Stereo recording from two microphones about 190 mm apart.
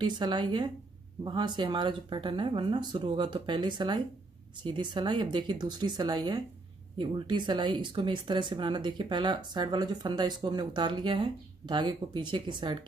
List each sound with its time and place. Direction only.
0.0 s speech: 25° right (ahead or behind)